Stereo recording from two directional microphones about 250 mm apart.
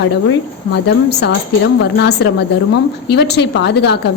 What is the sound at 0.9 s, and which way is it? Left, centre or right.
A woman's voice, left.